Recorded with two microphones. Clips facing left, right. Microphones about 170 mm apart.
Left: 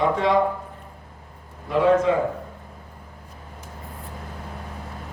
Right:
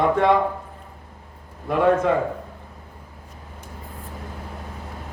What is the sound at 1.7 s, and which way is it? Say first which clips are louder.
Speech: even; 55° right (ahead or behind).